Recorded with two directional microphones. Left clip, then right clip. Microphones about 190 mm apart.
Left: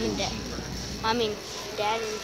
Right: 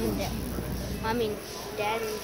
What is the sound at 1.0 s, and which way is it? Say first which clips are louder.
Speech: left 3 dB; 15° left (ahead or behind).